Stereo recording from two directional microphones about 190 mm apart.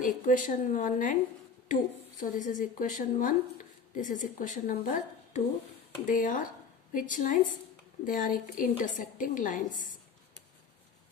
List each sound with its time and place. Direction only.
0.0 s a woman's voice: 45° left (ahead or behind)